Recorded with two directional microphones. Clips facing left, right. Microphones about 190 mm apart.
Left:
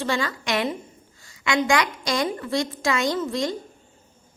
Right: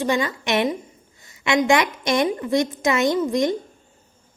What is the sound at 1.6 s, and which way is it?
A woman's voice, 20° right (ahead or behind).